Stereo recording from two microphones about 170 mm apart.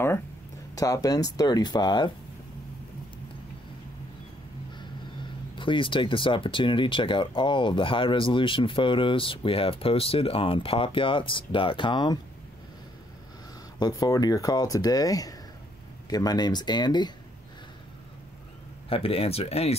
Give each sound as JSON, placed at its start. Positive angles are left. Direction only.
{"t": 0.7, "sound": "speech", "side_deg": 20}
{"t": 5.6, "sound": "speech", "side_deg": 30}
{"t": 13.7, "sound": "speech", "side_deg": 25}
{"t": 18.9, "sound": "speech", "side_deg": 35}